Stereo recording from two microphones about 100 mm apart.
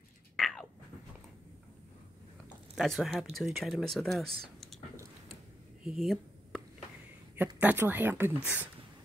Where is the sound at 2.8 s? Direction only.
Centre (ahead or behind).